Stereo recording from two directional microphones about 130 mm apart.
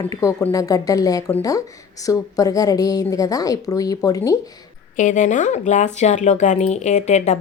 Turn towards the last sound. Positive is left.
turn(degrees=60)  # may be behind; listen again after turning